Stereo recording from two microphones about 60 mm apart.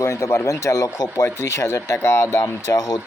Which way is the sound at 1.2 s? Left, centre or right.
Left.